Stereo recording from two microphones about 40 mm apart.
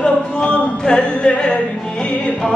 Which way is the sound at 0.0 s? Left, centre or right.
Left.